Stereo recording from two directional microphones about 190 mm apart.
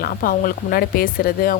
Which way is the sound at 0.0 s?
50° left (ahead or behind).